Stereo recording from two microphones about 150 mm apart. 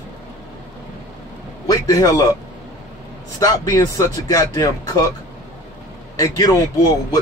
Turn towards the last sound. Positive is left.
turn(degrees=25)  # may be behind; listen again after turning